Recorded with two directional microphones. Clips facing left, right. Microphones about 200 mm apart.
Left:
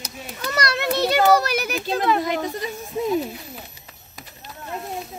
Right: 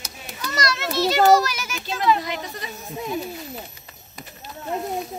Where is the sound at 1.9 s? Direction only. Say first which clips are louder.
Even; 50° left (ahead or behind).